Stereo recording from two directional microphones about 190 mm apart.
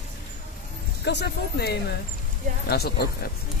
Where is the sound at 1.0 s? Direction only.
60° left (ahead or behind).